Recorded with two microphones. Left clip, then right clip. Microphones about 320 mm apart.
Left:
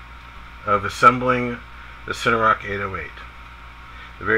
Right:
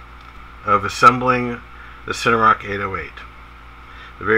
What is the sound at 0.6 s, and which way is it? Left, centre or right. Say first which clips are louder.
Speech: right 2 dB; centre.